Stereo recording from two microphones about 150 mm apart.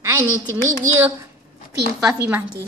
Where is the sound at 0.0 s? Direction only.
20° right (ahead or behind).